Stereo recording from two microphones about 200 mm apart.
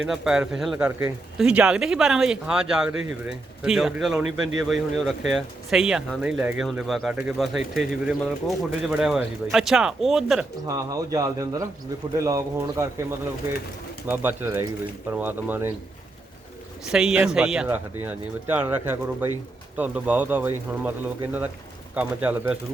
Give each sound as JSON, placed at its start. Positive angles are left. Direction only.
{"t": 0.1, "sound": "speech", "side_deg": -5}
{"t": 10.7, "sound": "speech", "side_deg": -15}
{"t": 16.9, "sound": "speech", "side_deg": -5}